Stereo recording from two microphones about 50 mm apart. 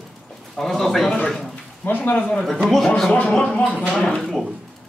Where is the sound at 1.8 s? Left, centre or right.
Left.